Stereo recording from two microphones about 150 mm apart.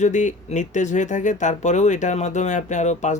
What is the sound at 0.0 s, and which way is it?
Speech, 55° left (ahead or behind).